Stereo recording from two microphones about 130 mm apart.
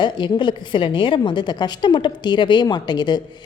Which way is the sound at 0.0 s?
35° left (ahead or behind).